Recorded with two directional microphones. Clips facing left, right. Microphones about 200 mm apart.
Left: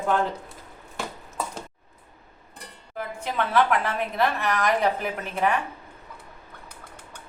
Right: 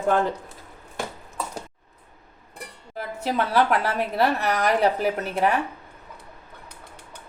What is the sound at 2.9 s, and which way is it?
A woman's voice, 40° right (ahead or behind).